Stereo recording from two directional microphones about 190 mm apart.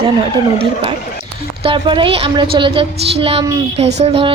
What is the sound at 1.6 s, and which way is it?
A woman's voice, 25° right (ahead or behind).